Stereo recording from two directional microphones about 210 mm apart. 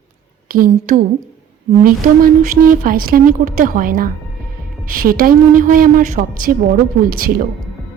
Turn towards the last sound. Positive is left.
turn(degrees=-45)  # may be behind; listen again after turning